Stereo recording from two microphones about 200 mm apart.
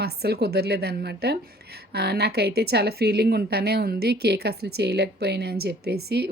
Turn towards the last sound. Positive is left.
turn(degrees=-55)  # may be behind; listen again after turning